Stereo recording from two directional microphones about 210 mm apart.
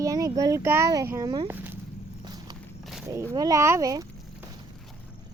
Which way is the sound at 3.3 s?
15° right (ahead or behind).